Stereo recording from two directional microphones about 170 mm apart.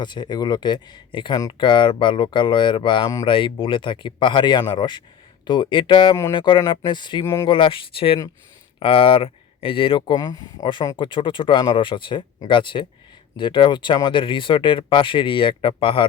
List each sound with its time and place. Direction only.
0.0 s speech: 25° left (ahead or behind)
7.5 s speech: 30° left (ahead or behind)